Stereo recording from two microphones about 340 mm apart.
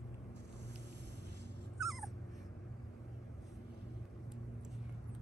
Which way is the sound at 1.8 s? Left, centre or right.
Centre.